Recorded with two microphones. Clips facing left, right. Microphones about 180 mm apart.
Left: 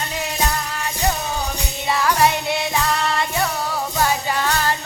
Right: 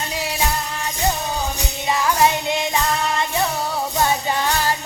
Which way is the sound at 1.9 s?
20° right (ahead or behind).